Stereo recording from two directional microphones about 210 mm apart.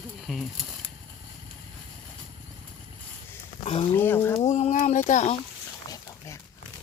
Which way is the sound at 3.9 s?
10° left (ahead or behind).